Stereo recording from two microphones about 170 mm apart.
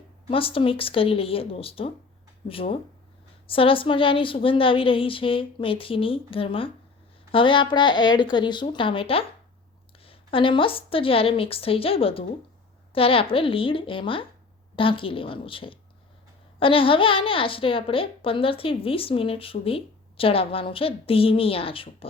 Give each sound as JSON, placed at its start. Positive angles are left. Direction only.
{"t": 0.3, "sound": "a woman's voice", "side_deg": 30}